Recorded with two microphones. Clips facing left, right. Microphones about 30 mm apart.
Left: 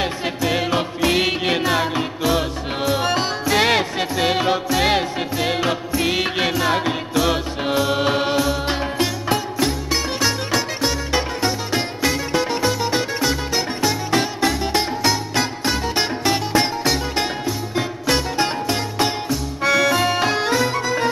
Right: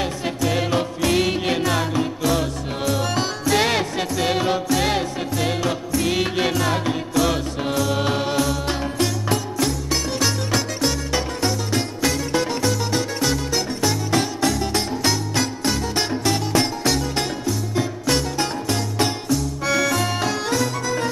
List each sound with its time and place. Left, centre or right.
0.0 s music: left